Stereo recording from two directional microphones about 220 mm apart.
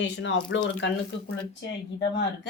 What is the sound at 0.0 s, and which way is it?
Speech, 55° left (ahead or behind).